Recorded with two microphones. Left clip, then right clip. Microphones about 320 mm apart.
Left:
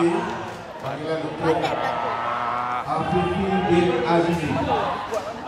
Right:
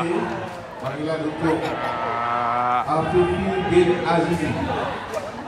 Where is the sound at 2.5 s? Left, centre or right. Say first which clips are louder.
Right 5 dB; centre.